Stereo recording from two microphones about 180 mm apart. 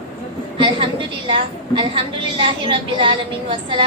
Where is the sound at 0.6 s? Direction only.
30° right (ahead or behind).